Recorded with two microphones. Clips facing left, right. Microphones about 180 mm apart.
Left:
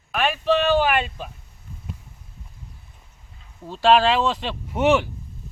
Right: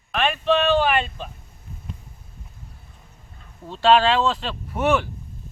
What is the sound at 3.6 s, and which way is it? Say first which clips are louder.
Speech: even; 5° left (ahead or behind).